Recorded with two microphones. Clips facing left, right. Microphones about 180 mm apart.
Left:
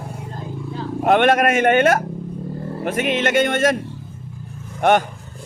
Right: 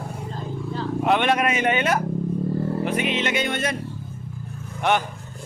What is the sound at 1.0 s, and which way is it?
A man's voice, 50° left (ahead or behind).